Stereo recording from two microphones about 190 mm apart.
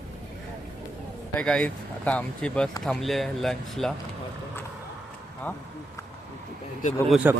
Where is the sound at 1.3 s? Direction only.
5° left (ahead or behind).